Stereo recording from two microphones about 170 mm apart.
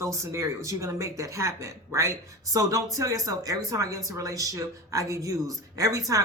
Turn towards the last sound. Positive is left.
turn(degrees=-20)  # may be behind; listen again after turning